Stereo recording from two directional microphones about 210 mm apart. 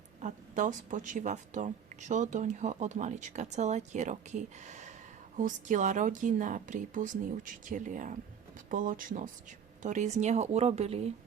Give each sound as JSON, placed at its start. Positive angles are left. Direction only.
{"t": 0.2, "sound": "a woman's voice", "side_deg": -35}